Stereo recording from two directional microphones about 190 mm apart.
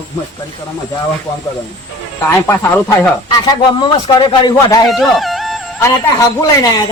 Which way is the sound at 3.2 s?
25° left (ahead or behind).